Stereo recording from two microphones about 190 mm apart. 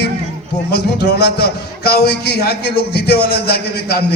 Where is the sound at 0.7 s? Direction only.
60° left (ahead or behind).